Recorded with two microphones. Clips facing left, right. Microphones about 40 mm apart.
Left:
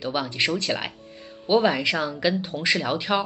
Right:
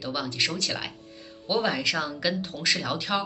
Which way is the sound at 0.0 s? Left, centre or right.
Left.